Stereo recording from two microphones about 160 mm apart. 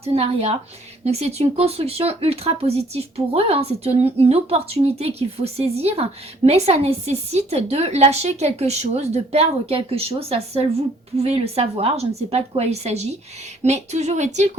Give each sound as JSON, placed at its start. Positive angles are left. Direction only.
{"t": 0.0, "sound": "speech", "side_deg": -40}